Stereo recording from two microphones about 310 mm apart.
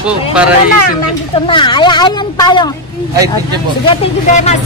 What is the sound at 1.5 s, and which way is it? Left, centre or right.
Speech, centre.